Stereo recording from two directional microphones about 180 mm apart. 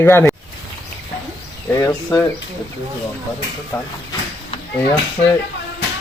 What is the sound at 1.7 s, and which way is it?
Speech, 20° left (ahead or behind).